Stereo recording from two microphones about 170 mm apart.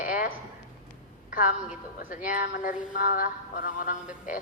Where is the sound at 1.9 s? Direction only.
55° left (ahead or behind).